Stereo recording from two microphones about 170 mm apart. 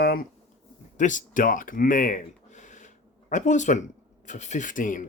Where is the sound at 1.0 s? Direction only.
50° left (ahead or behind).